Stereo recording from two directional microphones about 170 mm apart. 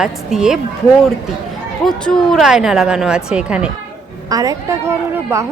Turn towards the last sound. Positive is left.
turn(degrees=-15)  # may be behind; listen again after turning